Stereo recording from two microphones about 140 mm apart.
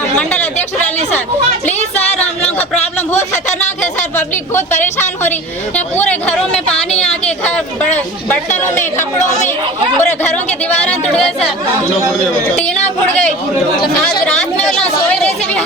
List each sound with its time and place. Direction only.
4.8 s speech: 15° left (ahead or behind)
7.1 s a sound: 10° left (ahead or behind)
7.9 s speech: 10° left (ahead or behind)
12.5 s speech: 10° left (ahead or behind)
14.0 s speech: 10° left (ahead or behind)